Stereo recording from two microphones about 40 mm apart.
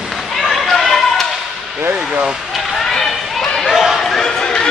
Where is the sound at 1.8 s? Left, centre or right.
Right.